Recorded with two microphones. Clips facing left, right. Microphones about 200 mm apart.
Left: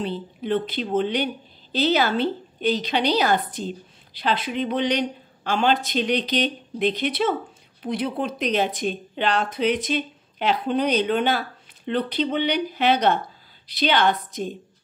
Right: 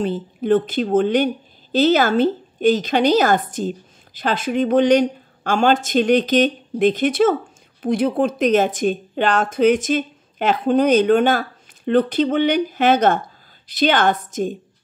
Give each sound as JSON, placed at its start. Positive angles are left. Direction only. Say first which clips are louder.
{"t": 0.0, "sound": "a woman's voice", "louder": "right 6 dB", "side_deg": -45}